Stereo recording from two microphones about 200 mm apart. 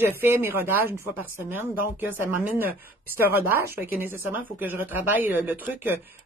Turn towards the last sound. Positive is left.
turn(degrees=-10)  # may be behind; listen again after turning